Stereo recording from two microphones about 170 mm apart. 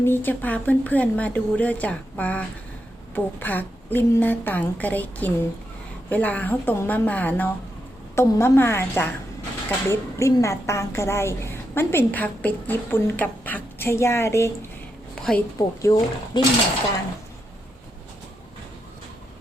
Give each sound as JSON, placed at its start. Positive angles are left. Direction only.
{"t": 0.0, "sound": "a woman's voice", "side_deg": 10}
{"t": 15.1, "sound": "a sound", "side_deg": 5}
{"t": 15.5, "sound": "speech", "side_deg": 20}